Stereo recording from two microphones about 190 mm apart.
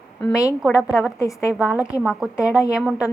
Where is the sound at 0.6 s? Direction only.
5° right (ahead or behind).